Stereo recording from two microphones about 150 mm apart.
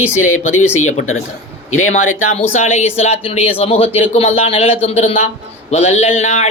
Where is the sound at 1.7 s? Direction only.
55° left (ahead or behind).